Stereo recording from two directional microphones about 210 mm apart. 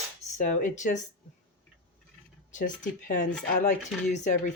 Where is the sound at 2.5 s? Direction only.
40° left (ahead or behind).